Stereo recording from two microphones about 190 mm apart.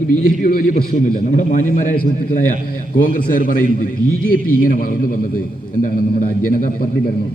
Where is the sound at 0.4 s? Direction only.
50° left (ahead or behind).